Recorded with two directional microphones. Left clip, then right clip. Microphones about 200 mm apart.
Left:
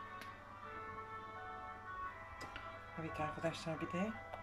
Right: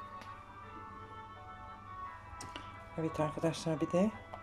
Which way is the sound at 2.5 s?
35° right (ahead or behind).